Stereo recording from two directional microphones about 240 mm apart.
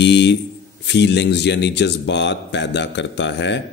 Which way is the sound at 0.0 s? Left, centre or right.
Left.